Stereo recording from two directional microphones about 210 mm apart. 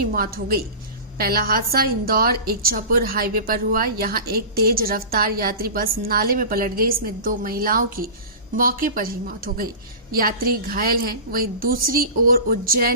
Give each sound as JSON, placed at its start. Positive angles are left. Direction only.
{"t": 0.1, "sound": "a woman's voice", "side_deg": -45}